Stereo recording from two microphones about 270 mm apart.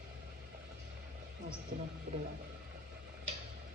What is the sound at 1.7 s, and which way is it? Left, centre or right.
Speech, right.